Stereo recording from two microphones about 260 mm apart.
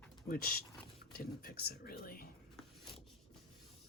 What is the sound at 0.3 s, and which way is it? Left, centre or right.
Speech, left.